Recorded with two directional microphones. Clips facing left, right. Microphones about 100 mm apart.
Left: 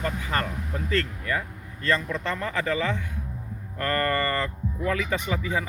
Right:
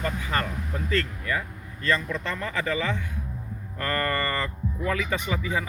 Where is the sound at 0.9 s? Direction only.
35° left (ahead or behind).